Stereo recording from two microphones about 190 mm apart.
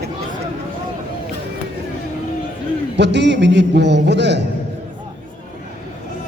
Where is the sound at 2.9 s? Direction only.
65° right (ahead or behind).